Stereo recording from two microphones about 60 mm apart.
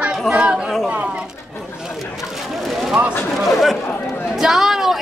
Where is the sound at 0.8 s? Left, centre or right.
Centre.